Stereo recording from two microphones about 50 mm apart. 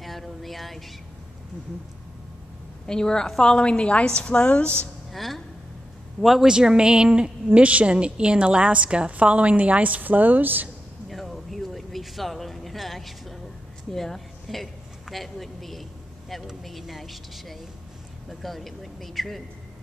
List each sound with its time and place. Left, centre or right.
0.0 s a sound: centre
2.9 s a woman's voice: centre
5.1 s speech: centre
6.4 s a woman's voice: centre; by 10.7 s right
11.1 s a sound: centre
13.9 s a woman's voice: centre